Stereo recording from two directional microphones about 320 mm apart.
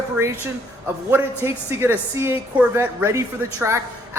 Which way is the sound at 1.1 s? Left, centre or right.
Centre.